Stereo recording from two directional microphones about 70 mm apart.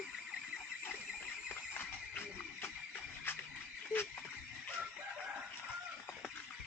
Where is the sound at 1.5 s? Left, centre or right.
Left.